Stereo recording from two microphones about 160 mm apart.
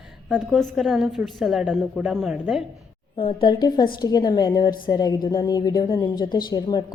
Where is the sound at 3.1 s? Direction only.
35° left (ahead or behind).